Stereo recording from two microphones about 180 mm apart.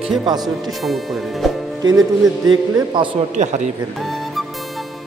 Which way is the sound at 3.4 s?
40° right (ahead or behind).